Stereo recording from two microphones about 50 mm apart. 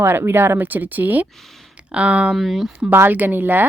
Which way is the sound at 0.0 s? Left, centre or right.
Right.